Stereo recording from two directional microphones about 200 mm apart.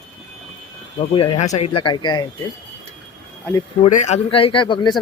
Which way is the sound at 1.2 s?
30° left (ahead or behind).